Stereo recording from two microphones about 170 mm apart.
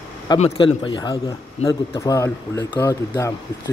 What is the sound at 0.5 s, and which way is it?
Speech, 25° left (ahead or behind).